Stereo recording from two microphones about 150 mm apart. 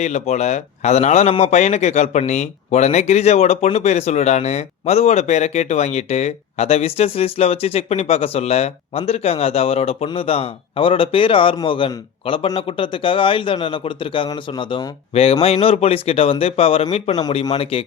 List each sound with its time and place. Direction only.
0.0 s a man's voice: 50° left (ahead or behind)
17.2 s a man's voice: 30° left (ahead or behind)